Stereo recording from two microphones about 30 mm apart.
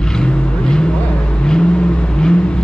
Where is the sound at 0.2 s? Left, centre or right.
Left.